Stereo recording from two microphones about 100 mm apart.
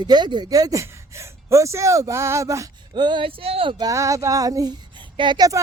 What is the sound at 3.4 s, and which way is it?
Speech, 70° right (ahead or behind).